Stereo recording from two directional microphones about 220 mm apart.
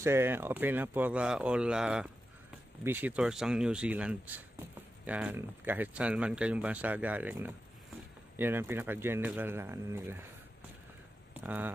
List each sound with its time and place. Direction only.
0.0 s speech: 10° right (ahead or behind)
11.4 s speech: 5° right (ahead or behind)